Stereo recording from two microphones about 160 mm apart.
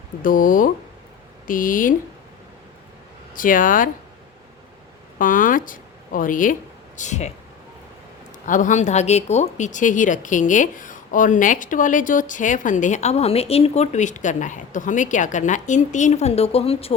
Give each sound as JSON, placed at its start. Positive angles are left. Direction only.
{"t": 0.2, "sound": "speech", "side_deg": 60}
{"t": 3.3, "sound": "speech", "side_deg": 55}
{"t": 5.1, "sound": "speech", "side_deg": 55}
{"t": 8.4, "sound": "speech", "side_deg": 55}